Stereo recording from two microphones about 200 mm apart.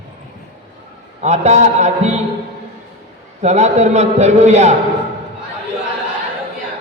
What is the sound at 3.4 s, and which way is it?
A man's voice, 35° right (ahead or behind).